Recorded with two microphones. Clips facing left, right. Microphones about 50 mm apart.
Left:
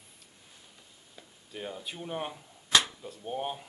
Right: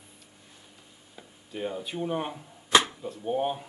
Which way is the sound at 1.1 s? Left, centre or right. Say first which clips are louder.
Right 5 dB; centre.